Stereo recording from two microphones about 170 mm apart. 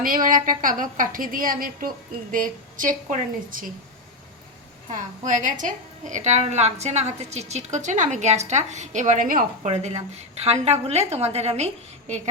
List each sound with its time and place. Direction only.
0.0 s a woman's voice: 55° right (ahead or behind)
4.9 s a woman's voice: 45° right (ahead or behind)
9.6 s a woman's voice: 40° right (ahead or behind)